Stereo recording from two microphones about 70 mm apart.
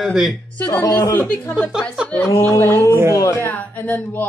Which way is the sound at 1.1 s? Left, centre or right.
Left.